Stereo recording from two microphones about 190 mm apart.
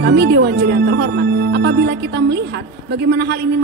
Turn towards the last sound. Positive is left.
turn(degrees=-60)  # may be behind; listen again after turning